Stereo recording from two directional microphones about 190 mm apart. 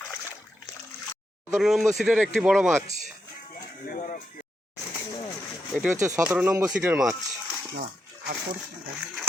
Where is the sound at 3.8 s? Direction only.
45° left (ahead or behind).